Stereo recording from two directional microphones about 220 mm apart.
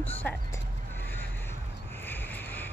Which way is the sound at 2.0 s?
10° left (ahead or behind).